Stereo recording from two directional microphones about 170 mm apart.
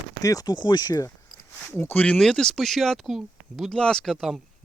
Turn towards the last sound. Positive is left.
turn(degrees=0)  # may be behind; listen again after turning